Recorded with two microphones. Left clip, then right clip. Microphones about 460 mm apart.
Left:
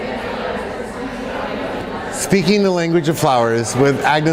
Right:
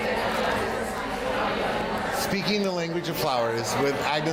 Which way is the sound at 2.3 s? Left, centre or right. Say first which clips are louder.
Left 11 dB; left.